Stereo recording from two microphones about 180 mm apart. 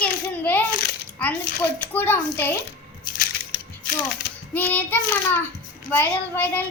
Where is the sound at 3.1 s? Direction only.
55° left (ahead or behind).